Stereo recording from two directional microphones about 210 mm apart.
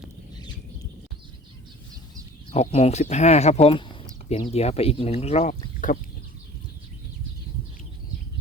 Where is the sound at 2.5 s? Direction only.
30° left (ahead or behind).